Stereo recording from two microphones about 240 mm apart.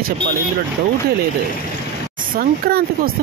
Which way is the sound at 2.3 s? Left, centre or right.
Right.